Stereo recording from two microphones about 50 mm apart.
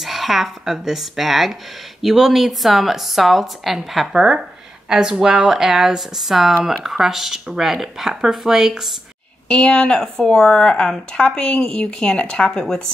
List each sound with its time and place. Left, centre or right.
0.0 s a woman's voice: centre
9.5 s speech: centre
12.5 s speech: centre